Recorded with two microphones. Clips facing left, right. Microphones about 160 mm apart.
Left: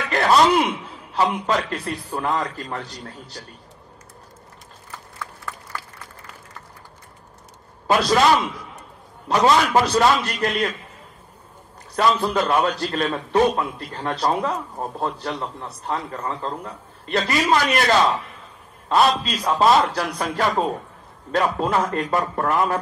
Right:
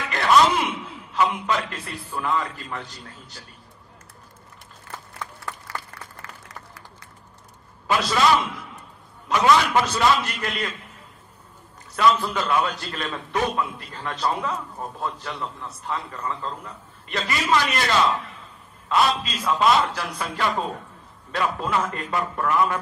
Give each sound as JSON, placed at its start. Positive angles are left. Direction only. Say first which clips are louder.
{"t": 0.1, "sound": "a man's voice", "louder": "left 2 dB", "side_deg": 40}
{"t": 6.2, "sound": "applause", "louder": "even", "side_deg": -90}
{"t": 7.8, "sound": "a man's voice", "louder": "left 5 dB", "side_deg": 35}
{"t": 9.3, "sound": "a man's voice", "louder": "left 2 dB", "side_deg": 35}
{"t": 11.9, "sound": "a man's voice", "louder": "left 1 dB", "side_deg": 35}
{"t": 18.9, "sound": "a man's voice", "louder": "left 3 dB", "side_deg": 35}